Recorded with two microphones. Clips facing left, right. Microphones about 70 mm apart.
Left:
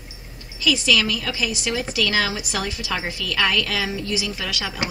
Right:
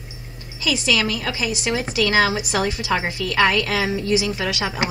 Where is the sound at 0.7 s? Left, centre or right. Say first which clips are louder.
Right 1 dB; right.